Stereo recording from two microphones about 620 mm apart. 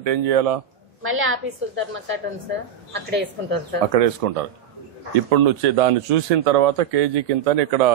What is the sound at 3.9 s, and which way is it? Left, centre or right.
A man's voice, right.